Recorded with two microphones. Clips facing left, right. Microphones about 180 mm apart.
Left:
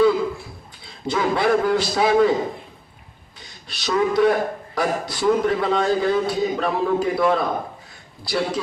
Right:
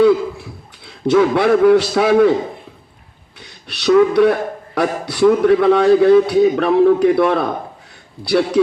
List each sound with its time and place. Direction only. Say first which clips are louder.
0.9 s a man's voice: right 9 dB; 65° right (ahead or behind)
3.4 s a man's voice: right 12 dB; 65° right (ahead or behind)